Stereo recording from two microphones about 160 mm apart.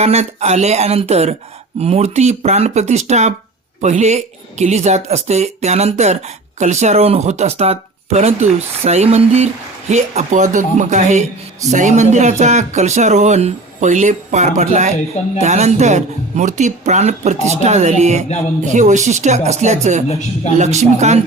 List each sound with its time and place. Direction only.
0.0 s speech: 45° right (ahead or behind)
20.1 s a man's voice: 45° left (ahead or behind)
20.6 s speech: 45° right (ahead or behind)